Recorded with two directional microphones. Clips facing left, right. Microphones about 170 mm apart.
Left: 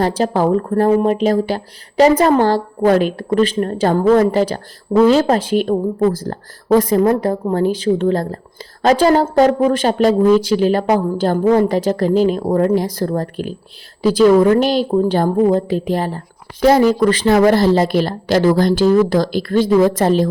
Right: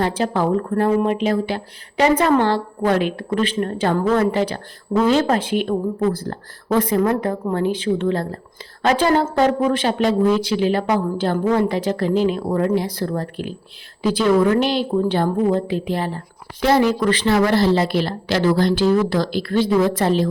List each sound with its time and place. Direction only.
0.0 s a woman's voice: 40° left (ahead or behind)